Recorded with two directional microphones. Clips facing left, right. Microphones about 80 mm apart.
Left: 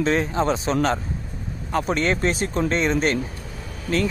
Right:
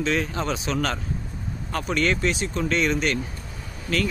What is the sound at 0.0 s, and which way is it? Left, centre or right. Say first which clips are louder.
Speech: left 4 dB; left.